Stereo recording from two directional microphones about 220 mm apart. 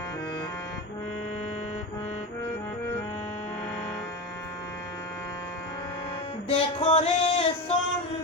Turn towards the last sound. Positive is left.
turn(degrees=25)  # may be behind; listen again after turning